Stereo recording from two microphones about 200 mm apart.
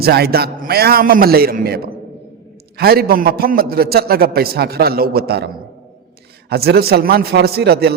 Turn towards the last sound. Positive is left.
turn(degrees=-55)  # may be behind; listen again after turning